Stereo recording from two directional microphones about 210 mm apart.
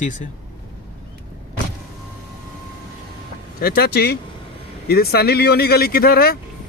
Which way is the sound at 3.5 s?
45° left (ahead or behind).